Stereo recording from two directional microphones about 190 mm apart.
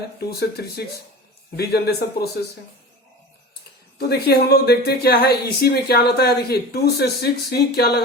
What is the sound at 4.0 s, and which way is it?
Speech, 55° left (ahead or behind).